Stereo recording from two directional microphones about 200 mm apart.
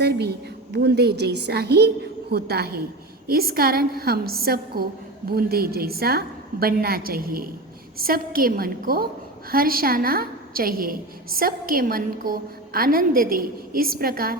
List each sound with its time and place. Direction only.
0.0 s a woman's voice: 55° right (ahead or behind)